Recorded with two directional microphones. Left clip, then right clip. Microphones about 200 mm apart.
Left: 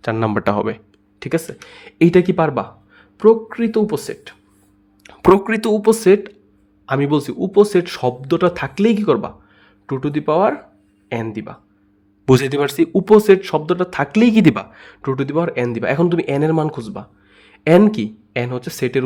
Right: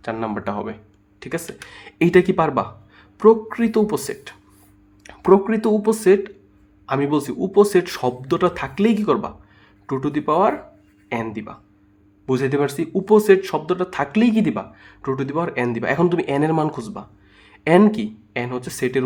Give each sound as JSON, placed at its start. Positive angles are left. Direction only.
{"t": 0.0, "sound": "a man's voice", "side_deg": 35}
{"t": 5.2, "sound": "a man's voice", "side_deg": 45}
{"t": 12.2, "sound": "a man's voice", "side_deg": 45}
{"t": 15.0, "sound": "speech", "side_deg": 25}